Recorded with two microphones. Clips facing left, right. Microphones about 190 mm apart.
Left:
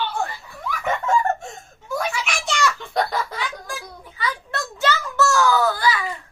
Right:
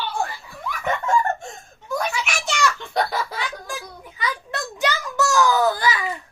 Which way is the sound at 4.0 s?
15° right (ahead or behind).